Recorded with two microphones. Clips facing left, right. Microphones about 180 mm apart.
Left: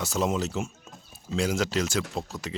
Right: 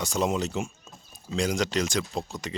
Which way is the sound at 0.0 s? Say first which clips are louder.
Even; centre (ahead or behind).